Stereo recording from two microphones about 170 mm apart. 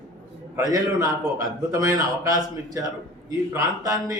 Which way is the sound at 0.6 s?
20° right (ahead or behind).